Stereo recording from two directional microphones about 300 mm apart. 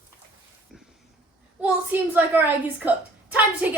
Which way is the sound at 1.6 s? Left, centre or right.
Centre.